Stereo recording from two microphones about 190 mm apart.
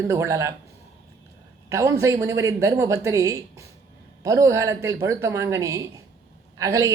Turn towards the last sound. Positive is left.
turn(degrees=-15)  # may be behind; listen again after turning